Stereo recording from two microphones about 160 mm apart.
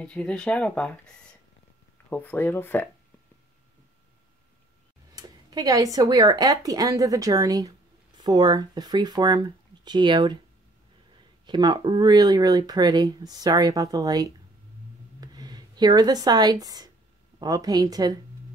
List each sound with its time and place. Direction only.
0.0 s speech: 5° left (ahead or behind)
5.1 s speech: 25° right (ahead or behind)
11.4 s speech: 30° right (ahead or behind)
15.1 s a sound: 25° right (ahead or behind)
17.4 s speech: 25° right (ahead or behind)